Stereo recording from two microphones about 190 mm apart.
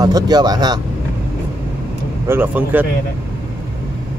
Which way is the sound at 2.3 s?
10° right (ahead or behind).